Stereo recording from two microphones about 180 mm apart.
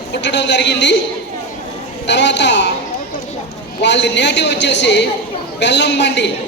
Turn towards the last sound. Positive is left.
turn(degrees=75)  # may be behind; listen again after turning